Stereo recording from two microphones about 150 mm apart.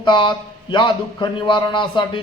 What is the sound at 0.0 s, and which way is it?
A man's voice, 30° left (ahead or behind).